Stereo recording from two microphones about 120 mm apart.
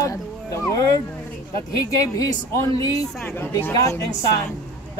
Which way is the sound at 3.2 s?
15° left (ahead or behind).